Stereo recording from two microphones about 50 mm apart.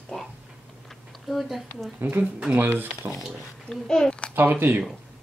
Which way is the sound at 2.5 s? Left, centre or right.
Right.